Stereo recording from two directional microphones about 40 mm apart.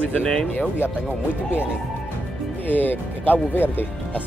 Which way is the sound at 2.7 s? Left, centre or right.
Left.